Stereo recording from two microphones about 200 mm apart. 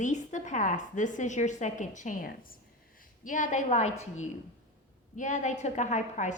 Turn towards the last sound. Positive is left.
turn(degrees=35)  # may be behind; listen again after turning